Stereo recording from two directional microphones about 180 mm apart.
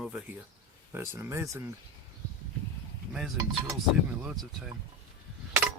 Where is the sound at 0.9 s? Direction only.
15° right (ahead or behind).